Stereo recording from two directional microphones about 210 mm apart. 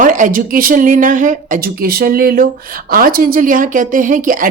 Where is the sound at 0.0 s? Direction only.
40° right (ahead or behind).